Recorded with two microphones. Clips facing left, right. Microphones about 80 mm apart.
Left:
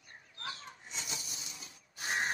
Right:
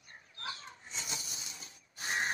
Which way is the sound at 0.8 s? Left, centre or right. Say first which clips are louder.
Right 1 dB; right.